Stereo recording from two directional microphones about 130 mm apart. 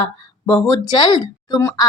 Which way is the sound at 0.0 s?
30° left (ahead or behind).